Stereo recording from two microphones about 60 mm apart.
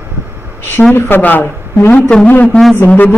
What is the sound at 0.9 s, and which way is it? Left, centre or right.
Speech, left.